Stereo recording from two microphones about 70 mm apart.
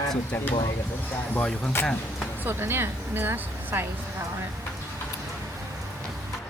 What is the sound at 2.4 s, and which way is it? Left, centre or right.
Speech, right.